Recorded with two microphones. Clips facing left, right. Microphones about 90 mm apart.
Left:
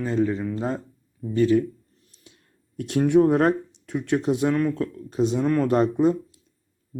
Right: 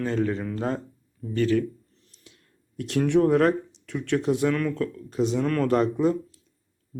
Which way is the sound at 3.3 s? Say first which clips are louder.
Left 1 dB; 30° left (ahead or behind).